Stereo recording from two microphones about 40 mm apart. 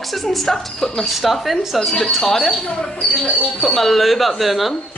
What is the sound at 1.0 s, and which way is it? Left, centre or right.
Speech, centre.